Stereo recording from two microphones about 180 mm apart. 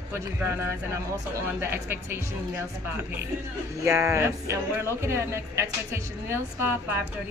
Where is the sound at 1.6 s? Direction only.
15° right (ahead or behind).